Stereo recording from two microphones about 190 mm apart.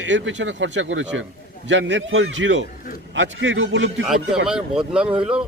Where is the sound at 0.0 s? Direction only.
75° right (ahead or behind).